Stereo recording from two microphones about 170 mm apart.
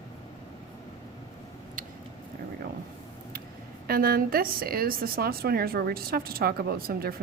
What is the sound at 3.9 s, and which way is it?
A woman's voice, 60° right (ahead or behind).